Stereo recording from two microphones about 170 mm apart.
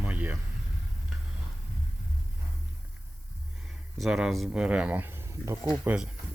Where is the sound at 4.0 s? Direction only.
Centre (ahead or behind).